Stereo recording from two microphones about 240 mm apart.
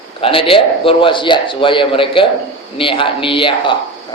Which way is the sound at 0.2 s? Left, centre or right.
Left.